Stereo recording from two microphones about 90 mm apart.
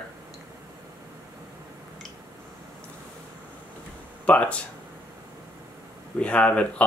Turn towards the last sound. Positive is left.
turn(degrees=15)  # may be behind; listen again after turning